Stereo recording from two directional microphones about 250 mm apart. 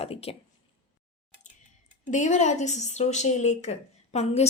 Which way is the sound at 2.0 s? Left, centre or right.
Left.